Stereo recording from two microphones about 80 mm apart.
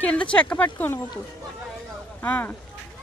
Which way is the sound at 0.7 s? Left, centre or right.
Left.